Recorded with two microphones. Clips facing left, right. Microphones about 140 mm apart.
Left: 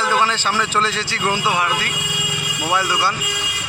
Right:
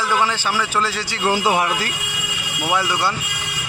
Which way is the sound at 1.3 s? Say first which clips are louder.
Right 2 dB; 40° right (ahead or behind).